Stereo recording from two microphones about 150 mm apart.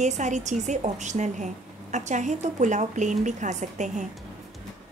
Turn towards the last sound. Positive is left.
turn(degrees=-55)  # may be behind; listen again after turning